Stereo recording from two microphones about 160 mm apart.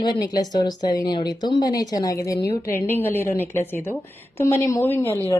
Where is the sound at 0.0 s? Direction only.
25° left (ahead or behind).